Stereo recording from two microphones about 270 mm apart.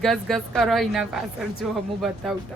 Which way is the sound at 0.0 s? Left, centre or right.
Centre.